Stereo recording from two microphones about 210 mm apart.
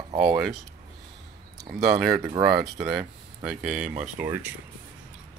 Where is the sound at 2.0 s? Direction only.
Centre (ahead or behind).